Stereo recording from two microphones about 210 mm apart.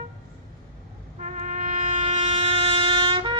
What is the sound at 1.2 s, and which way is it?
Music, 35° right (ahead or behind).